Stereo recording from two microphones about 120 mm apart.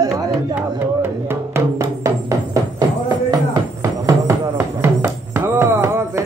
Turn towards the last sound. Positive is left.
turn(degrees=-20)  # may be behind; listen again after turning